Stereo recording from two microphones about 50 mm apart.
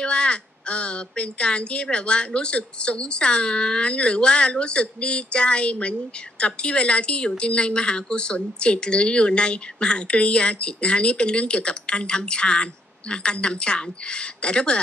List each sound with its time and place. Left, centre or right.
0.0 s speech: centre